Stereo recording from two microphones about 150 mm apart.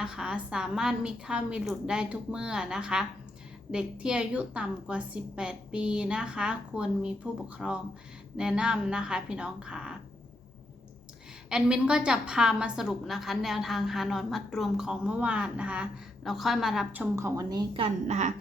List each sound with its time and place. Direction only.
0.0 s a woman's voice: 5° right (ahead or behind)
11.4 s a woman's voice: 5° right (ahead or behind)
16.9 s a woman's voice: 15° right (ahead or behind)
18.1 s a woman's voice: 50° right (ahead or behind)